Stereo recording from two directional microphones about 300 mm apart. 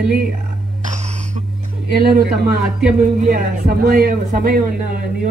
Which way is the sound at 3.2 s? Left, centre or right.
Right.